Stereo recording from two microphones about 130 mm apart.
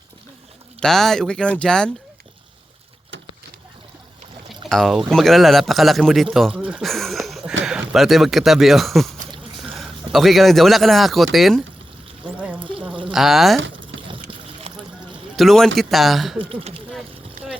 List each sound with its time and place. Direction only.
0.8 s speech: centre (ahead or behind)
4.7 s speech: centre (ahead or behind)
6.9 s a sound: centre (ahead or behind)
9.6 s speech: centre (ahead or behind)
12.5 s a sound: 40° right (ahead or behind)
13.1 s speech: centre (ahead or behind)
13.7 s a sound: 40° right (ahead or behind)
15.4 s speech: 5° left (ahead or behind)
16.4 s speech: 45° right (ahead or behind)